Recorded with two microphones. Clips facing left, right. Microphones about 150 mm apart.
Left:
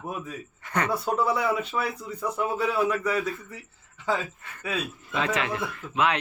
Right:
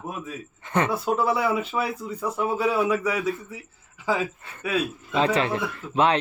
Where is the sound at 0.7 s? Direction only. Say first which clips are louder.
Right 4 dB; 25° right (ahead or behind).